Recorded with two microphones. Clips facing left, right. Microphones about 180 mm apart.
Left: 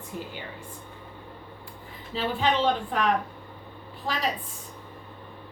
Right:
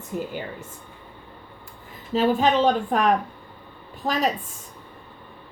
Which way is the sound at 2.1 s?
45° right (ahead or behind).